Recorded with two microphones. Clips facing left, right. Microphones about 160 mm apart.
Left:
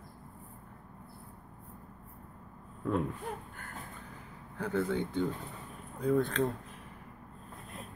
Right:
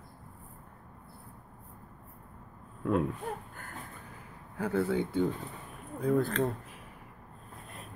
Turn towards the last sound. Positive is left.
turn(degrees=0)  # may be behind; listen again after turning